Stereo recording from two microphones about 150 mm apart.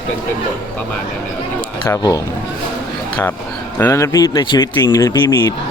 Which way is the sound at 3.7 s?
20° left (ahead or behind).